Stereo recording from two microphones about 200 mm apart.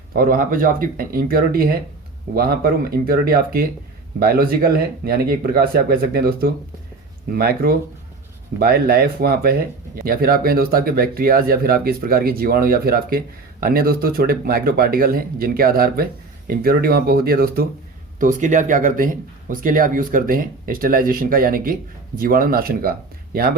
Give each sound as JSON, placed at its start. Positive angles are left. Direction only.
{"t": 0.1, "sound": "speech", "side_deg": -45}